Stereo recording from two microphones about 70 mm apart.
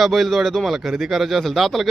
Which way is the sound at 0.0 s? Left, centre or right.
Centre.